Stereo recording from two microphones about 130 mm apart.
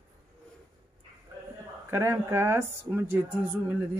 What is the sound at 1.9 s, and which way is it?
Speech, 20° right (ahead or behind).